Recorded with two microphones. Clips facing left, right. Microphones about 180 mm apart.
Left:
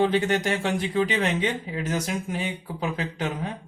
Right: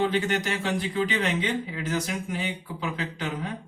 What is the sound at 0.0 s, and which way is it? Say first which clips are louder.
Speech: left 3 dB; 35° left (ahead or behind).